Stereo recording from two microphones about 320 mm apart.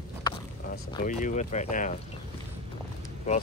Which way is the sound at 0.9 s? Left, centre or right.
Left.